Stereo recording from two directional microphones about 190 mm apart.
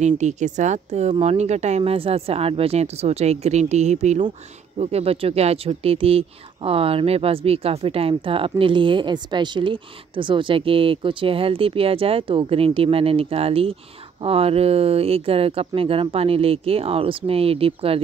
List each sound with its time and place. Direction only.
0.0 s speech: 40° right (ahead or behind)